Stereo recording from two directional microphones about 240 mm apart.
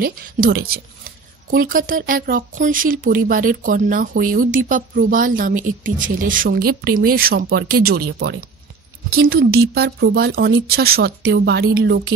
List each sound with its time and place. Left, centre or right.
0.0 s speech: right